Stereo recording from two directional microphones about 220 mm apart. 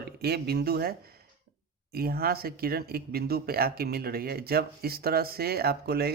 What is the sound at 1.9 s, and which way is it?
Speech, 45° right (ahead or behind).